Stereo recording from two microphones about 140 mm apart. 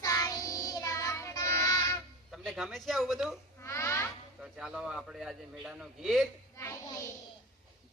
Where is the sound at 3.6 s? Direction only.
20° left (ahead or behind).